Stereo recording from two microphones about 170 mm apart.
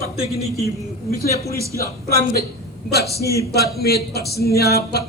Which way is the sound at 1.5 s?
15° right (ahead or behind).